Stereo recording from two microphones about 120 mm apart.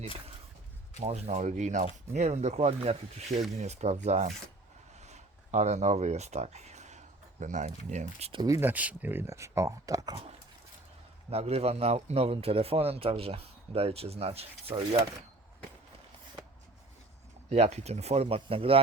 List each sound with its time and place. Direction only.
0.9 s speech: 60° right (ahead or behind); by 1.9 s 85° right
2.1 s a man's voice: 70° right (ahead or behind)
8.4 s speech: 25° right (ahead or behind)
8.7 s speech: 15° right (ahead or behind); by 10.2 s 30° right (ahead or behind)
11.3 s a man's voice: 60° right (ahead or behind)
17.5 s a man's voice: 65° right (ahead or behind)